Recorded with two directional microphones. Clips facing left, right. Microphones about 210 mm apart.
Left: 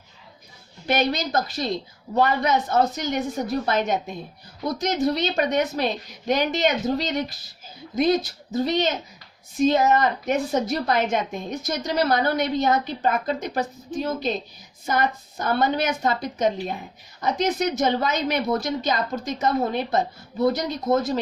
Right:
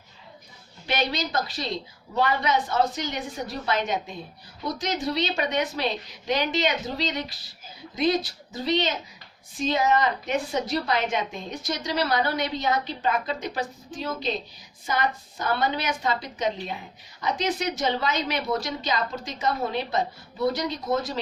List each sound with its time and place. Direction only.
0.9 s a woman's voice: 45° left (ahead or behind)
8.5 s a woman's voice: 45° left (ahead or behind)